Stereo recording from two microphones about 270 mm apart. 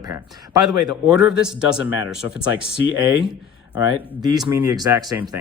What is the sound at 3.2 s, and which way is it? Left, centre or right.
Speech, centre.